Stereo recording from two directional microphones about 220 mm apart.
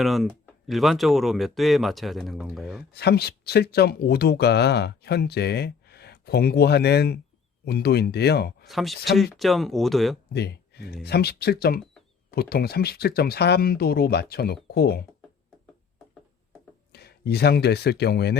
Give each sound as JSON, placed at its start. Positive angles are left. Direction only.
{"t": 0.0, "sound": "speech", "side_deg": 0}
{"t": 2.9, "sound": "speech", "side_deg": 45}
{"t": 8.6, "sound": "speech", "side_deg": 0}
{"t": 10.3, "sound": "speech", "side_deg": 50}
{"t": 16.9, "sound": "speech", "side_deg": 45}